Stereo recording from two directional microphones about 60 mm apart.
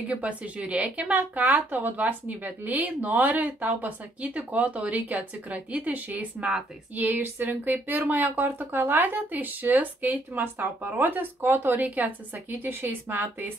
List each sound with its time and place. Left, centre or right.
0.1 s a woman's voice: right